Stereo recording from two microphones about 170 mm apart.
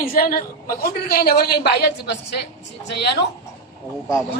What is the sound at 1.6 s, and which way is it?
A woman's voice, 80° left.